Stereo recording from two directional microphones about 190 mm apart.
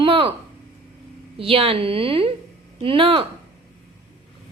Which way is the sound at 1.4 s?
30° right (ahead or behind).